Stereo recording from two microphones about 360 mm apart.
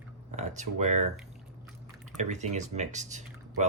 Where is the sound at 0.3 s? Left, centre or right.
Centre.